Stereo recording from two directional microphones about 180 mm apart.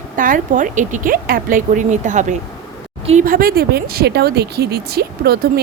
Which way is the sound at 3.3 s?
55° right (ahead or behind).